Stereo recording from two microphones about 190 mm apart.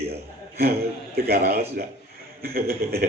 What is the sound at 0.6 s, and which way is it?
A man's voice, 55° right (ahead or behind).